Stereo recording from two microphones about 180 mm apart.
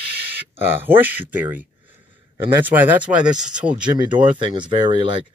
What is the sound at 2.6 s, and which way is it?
Speech, 10° right (ahead or behind).